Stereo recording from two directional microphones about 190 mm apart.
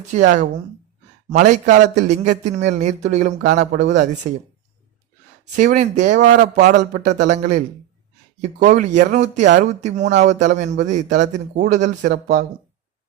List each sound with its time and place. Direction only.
0.1 s a man's voice: 40° right (ahead or behind)
5.5 s a man's voice: 40° right (ahead or behind)
8.7 s a man's voice: 40° right (ahead or behind)